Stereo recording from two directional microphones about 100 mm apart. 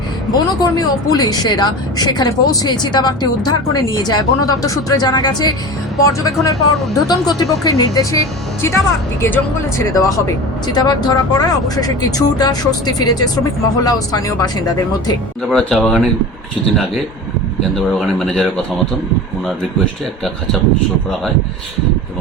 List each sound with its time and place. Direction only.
0.3 s a woman's voice: 40° left (ahead or behind)
15.4 s a man's voice: 5° left (ahead or behind)
17.7 s a man's voice: 5° left (ahead or behind)